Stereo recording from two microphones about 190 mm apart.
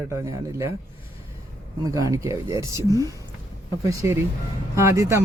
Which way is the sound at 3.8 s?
15° right (ahead or behind).